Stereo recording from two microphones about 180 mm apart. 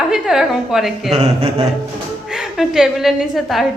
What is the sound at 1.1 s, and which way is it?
Speech, 35° right (ahead or behind).